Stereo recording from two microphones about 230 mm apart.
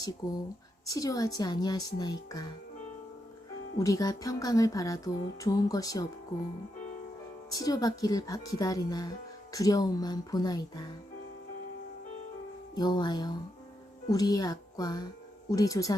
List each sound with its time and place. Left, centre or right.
0.2 s speech: centre
3.8 s speech: centre
7.5 s speech: centre
12.7 s speech: centre